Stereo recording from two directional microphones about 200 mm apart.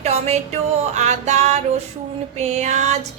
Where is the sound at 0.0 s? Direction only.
35° right (ahead or behind).